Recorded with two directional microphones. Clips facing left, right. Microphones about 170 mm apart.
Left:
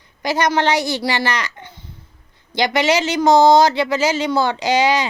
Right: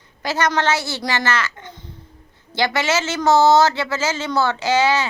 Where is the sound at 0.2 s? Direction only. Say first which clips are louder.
Left 3 dB; 15° left (ahead or behind).